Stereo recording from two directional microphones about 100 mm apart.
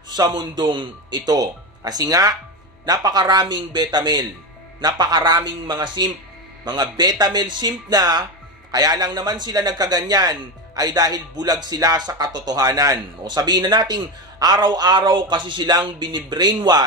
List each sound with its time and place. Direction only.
0.1 s speech: 45° right (ahead or behind)